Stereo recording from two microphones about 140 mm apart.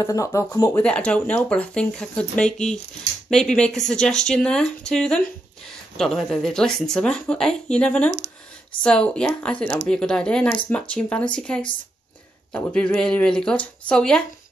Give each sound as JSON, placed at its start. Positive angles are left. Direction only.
{"t": 0.0, "sound": "speech", "side_deg": 20}
{"t": 0.8, "sound": "speech", "side_deg": 10}